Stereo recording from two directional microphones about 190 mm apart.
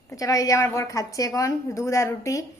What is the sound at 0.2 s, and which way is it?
A woman's voice, 20° left (ahead or behind).